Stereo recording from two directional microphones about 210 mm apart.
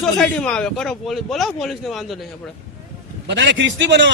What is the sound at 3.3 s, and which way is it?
Speech, 60° right (ahead or behind).